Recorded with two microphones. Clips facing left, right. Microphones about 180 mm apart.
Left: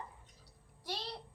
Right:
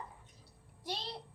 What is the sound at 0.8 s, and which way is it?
Speech, 20° right (ahead or behind).